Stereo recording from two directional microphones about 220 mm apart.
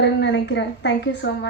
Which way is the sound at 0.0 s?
50° left (ahead or behind).